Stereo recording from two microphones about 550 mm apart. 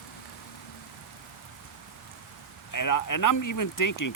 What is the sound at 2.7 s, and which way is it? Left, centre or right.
Speech, left.